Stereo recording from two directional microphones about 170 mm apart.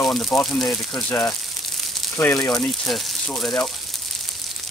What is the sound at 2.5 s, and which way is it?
Speech, centre (ahead or behind).